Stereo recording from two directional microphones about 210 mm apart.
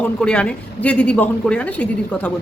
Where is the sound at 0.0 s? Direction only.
5° left (ahead or behind).